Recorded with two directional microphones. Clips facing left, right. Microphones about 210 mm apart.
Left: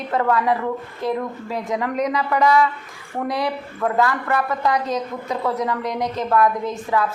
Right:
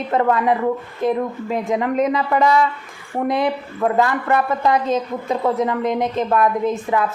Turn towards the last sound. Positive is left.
turn(degrees=-20)  # may be behind; listen again after turning